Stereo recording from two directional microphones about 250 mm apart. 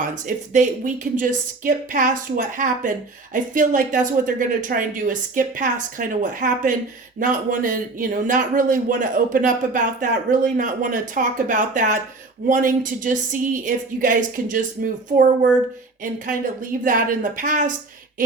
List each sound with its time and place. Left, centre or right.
0.1 s speech: right